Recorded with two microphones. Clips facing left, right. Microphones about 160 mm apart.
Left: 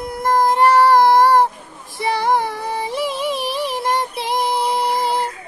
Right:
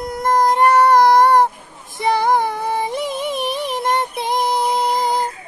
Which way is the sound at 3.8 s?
50° right (ahead or behind).